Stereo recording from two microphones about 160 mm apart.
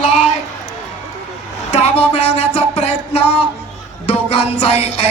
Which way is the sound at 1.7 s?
40° left (ahead or behind).